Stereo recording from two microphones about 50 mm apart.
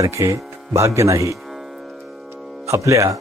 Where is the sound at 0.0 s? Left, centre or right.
Right.